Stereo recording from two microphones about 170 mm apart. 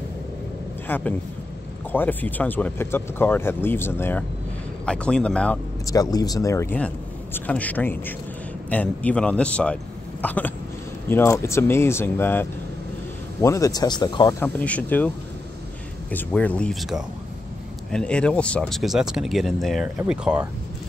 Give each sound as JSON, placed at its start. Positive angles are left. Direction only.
{"t": 0.8, "sound": "speech", "side_deg": 10}
{"t": 5.9, "sound": "speech", "side_deg": 20}
{"t": 14.4, "sound": "speech", "side_deg": 10}
{"t": 16.1, "sound": "speech", "side_deg": 10}